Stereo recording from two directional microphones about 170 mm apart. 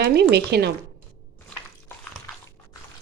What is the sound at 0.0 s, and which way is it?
Speech, 80° right.